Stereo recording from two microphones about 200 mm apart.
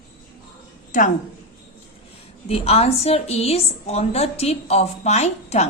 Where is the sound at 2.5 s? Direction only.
30° left (ahead or behind).